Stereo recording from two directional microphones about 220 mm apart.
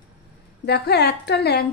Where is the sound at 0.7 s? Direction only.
50° left (ahead or behind).